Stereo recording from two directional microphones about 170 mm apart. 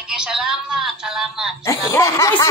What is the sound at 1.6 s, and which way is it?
Speech, 20° left (ahead or behind).